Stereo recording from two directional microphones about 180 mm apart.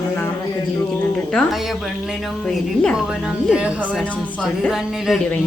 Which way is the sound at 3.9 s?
5° left (ahead or behind).